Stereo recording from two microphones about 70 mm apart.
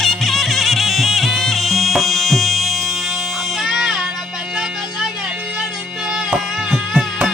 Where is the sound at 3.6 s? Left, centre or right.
Centre.